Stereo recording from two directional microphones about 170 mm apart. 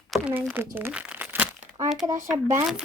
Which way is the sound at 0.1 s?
10° right (ahead or behind).